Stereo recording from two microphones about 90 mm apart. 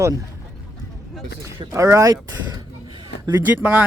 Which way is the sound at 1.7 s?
35° right (ahead or behind).